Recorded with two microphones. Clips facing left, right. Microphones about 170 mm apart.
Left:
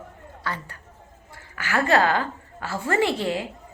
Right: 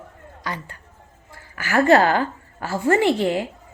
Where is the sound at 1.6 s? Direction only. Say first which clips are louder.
Right 5 dB; 35° right (ahead or behind).